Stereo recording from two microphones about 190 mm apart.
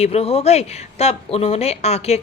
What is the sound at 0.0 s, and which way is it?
A woman's voice, 30° left (ahead or behind).